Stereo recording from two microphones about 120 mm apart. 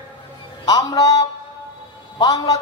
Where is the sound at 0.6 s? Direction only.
30° left (ahead or behind).